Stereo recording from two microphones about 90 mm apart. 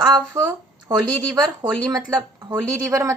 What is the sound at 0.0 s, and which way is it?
Speech, 50° right (ahead or behind).